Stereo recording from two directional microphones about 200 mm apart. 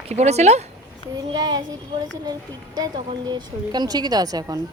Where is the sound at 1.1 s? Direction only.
20° right (ahead or behind).